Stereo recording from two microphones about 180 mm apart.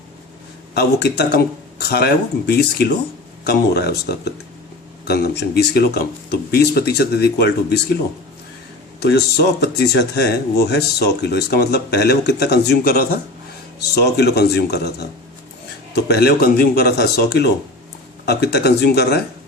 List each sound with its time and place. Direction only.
0.8 s speech: 65° left (ahead or behind)
9.0 s speech: 65° left (ahead or behind)